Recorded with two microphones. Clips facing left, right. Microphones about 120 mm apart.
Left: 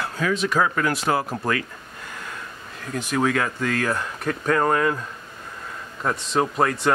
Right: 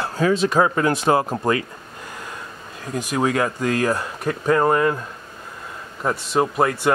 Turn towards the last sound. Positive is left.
turn(degrees=-5)  # may be behind; listen again after turning